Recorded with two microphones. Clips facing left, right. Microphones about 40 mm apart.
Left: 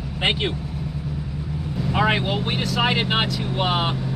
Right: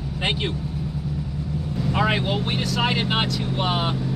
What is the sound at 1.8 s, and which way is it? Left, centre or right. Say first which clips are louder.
Speech: left 2 dB; centre.